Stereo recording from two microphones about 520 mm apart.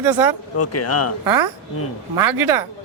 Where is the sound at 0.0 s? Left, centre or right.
Right.